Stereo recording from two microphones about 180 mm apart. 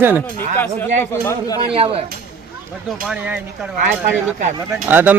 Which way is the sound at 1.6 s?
30° right (ahead or behind).